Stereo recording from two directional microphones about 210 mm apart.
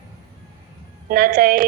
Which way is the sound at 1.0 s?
45° right (ahead or behind).